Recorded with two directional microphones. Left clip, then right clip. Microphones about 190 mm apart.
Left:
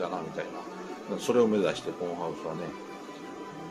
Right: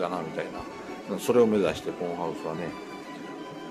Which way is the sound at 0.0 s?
25° right (ahead or behind).